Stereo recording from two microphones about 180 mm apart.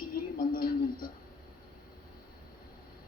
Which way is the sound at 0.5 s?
55° left (ahead or behind).